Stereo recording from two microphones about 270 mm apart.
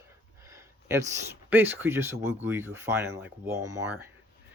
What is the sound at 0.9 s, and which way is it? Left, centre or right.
Speech, centre.